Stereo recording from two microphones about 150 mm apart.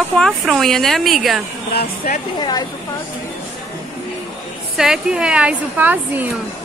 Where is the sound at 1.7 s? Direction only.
90° left.